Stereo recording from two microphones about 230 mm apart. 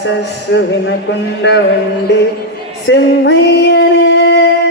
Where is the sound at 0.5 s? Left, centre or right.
Left.